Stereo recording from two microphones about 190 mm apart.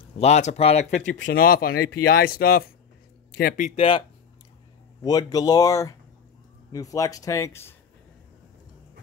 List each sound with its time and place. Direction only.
0.2 s speech: 35° left (ahead or behind)
3.7 s speech: 30° left (ahead or behind)
5.0 s speech: 20° left (ahead or behind)